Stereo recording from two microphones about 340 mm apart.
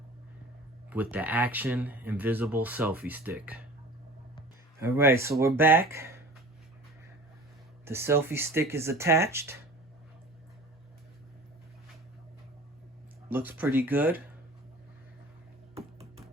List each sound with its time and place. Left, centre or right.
0.9 s speech: centre
4.8 s speech: centre
7.9 s speech: centre
13.3 s speech: centre
15.7 s music: centre